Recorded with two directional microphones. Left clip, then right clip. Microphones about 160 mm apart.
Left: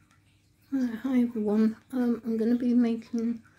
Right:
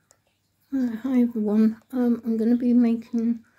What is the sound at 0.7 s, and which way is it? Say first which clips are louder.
Speech: right 3 dB; 15° right (ahead or behind).